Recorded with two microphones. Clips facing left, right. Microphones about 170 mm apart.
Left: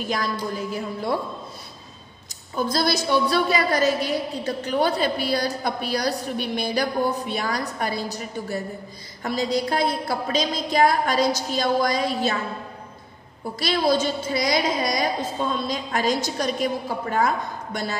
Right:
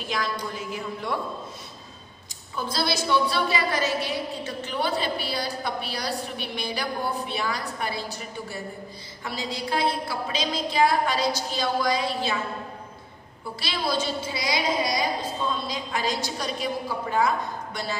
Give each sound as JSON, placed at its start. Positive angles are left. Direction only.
{"t": 0.1, "sound": "a woman's voice", "side_deg": 40}
{"t": 2.5, "sound": "a woman's voice", "side_deg": 45}
{"t": 13.6, "sound": "a woman's voice", "side_deg": 45}